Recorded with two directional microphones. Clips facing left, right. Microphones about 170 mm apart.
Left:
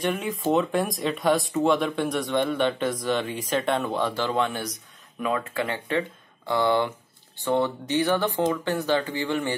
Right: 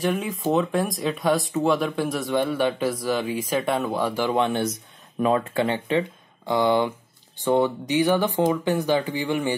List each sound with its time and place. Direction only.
0.0 s speech: centre (ahead or behind)